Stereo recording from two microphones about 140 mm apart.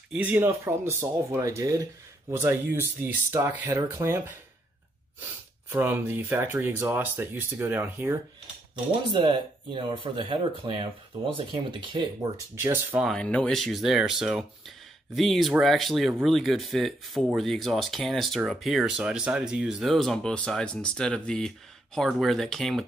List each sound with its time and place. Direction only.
0.1 s speech: 10° right (ahead or behind)
5.2 s speech: 15° right (ahead or behind)
9.1 s speech: 35° right (ahead or behind)
12.5 s speech: 15° right (ahead or behind)
13.0 s speech: 5° left (ahead or behind)